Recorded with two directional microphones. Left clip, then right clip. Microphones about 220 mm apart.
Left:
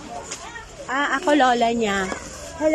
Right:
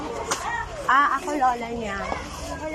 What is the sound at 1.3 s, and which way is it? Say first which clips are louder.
Speech: left 6 dB; 55° left (ahead or behind).